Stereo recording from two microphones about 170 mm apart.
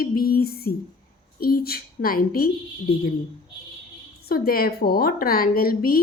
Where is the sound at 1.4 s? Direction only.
60° left (ahead or behind).